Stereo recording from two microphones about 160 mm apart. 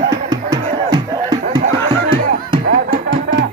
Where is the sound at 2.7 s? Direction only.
60° right (ahead or behind).